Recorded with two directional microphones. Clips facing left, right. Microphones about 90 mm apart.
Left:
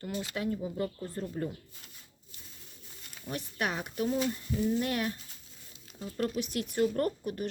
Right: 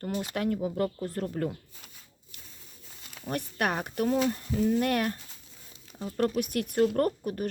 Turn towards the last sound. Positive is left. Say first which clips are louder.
# right 4 dB
turn(degrees=-45)  # may be behind; listen again after turning